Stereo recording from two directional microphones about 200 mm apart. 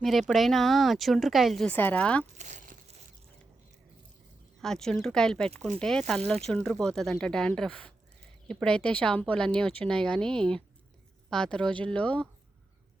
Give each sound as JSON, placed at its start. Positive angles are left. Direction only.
{"t": 0.0, "sound": "speech", "side_deg": 0}
{"t": 2.4, "sound": "crumpling", "side_deg": -40}
{"t": 4.6, "sound": "speech", "side_deg": 5}